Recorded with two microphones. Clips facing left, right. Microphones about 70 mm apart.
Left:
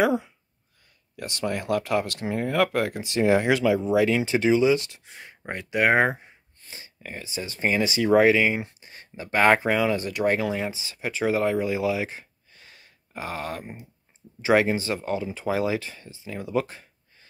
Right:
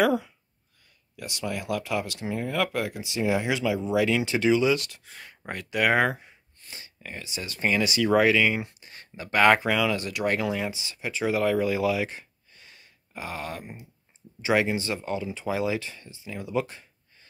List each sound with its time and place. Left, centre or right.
0.0 s speech: centre
1.1 s speech: left
3.9 s speech: left
7.0 s speech: left
11.6 s speech: left